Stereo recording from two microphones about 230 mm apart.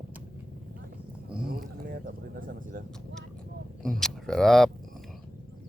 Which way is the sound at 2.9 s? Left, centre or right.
Centre.